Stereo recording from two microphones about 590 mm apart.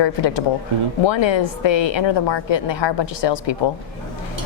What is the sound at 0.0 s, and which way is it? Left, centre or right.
A woman's voice, left.